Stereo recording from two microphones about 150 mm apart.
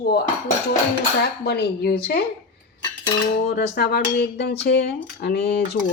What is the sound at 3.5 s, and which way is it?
Speech, 90° left.